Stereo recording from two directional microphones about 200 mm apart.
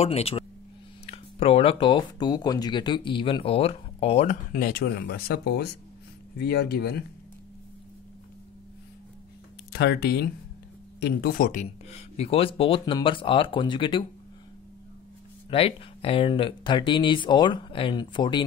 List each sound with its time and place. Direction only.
0.0 s speech: 30° left (ahead or behind); by 7.0 s 55° left (ahead or behind)
9.7 s speech: 55° left (ahead or behind); by 14.0 s 25° left (ahead or behind)
15.5 s speech: 30° left (ahead or behind)